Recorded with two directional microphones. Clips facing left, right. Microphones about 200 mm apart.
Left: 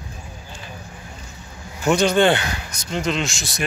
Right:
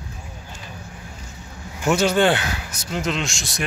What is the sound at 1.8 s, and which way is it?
Speech, 5° right (ahead or behind).